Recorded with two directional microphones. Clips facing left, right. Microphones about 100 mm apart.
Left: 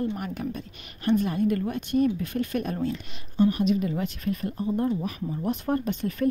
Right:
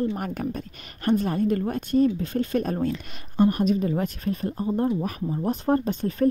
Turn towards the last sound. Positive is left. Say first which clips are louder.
# right 3 dB
turn(degrees=-35)  # may be behind; listen again after turning